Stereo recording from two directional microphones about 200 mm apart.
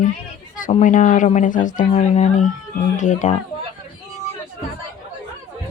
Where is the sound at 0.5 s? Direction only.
40° left (ahead or behind).